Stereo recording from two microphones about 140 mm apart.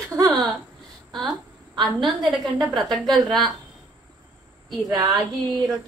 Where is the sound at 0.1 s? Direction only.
25° right (ahead or behind).